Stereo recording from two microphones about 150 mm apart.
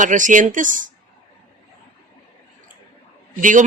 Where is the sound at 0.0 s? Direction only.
60° right (ahead or behind).